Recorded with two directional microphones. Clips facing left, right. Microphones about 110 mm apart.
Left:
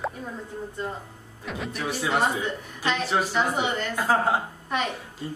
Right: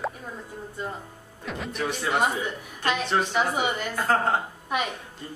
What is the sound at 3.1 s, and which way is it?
Speech, 5° left (ahead or behind).